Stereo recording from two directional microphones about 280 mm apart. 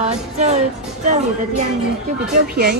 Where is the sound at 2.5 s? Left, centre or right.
Right.